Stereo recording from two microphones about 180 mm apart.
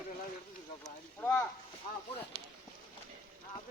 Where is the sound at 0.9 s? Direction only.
15° left (ahead or behind).